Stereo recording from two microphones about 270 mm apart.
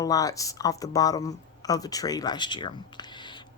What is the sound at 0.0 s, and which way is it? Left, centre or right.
Speech, centre.